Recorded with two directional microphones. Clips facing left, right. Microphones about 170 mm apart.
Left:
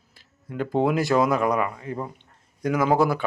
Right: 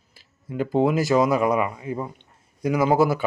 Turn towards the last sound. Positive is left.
turn(degrees=-5)  # may be behind; listen again after turning